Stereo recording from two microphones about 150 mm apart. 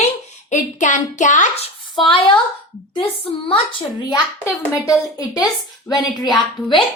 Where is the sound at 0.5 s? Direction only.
55° left (ahead or behind); by 2.4 s 35° left (ahead or behind).